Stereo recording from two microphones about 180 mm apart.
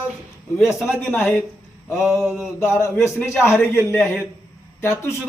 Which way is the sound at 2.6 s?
15° left (ahead or behind).